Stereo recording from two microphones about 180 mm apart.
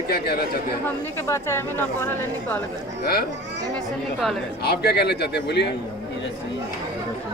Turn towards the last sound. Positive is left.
turn(degrees=65)  # may be behind; listen again after turning